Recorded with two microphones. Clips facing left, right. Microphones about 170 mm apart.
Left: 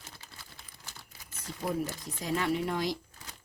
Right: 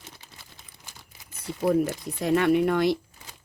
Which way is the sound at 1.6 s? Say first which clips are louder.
Right 10 dB; 65° right (ahead or behind).